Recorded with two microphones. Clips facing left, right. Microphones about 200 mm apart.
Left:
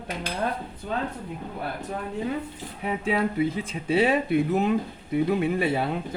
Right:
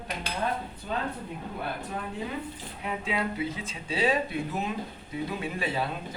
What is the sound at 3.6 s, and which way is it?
Speech, 60° left (ahead or behind).